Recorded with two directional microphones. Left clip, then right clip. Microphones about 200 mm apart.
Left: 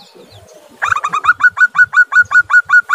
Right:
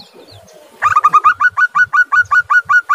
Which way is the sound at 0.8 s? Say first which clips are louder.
Right 6 dB; 10° left (ahead or behind).